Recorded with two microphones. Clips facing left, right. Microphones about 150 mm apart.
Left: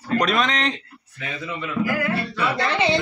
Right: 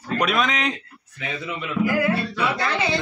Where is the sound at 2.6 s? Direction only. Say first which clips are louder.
Left 3 dB; 25° left (ahead or behind).